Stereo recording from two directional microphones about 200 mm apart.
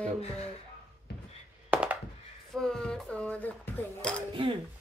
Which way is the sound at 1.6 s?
5° right (ahead or behind).